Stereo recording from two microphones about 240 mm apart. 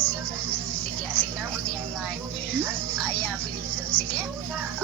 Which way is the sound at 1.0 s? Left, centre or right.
Centre.